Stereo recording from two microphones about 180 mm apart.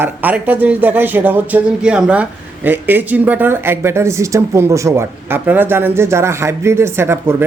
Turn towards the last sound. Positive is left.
turn(degrees=-15)  # may be behind; listen again after turning